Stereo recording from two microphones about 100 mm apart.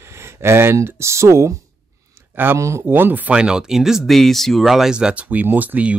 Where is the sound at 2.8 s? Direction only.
20° right (ahead or behind).